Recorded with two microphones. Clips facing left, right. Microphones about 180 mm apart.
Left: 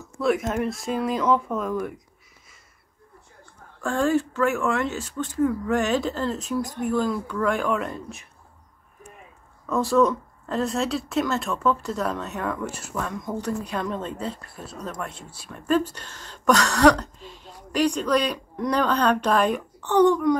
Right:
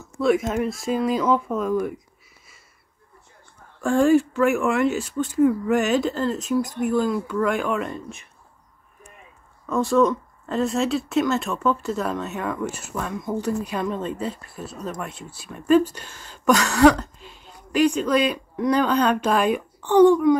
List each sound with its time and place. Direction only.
0.2 s speech: centre (ahead or behind)
3.8 s speech: 10° right (ahead or behind)
9.7 s speech: centre (ahead or behind)